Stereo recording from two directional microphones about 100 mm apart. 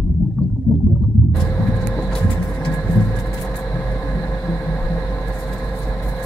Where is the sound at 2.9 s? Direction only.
25° left (ahead or behind).